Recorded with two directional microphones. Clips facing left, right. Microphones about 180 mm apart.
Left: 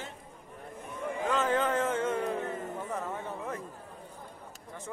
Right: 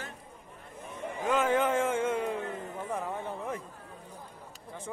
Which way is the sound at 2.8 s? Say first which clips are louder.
Right 1 dB; 15° right (ahead or behind).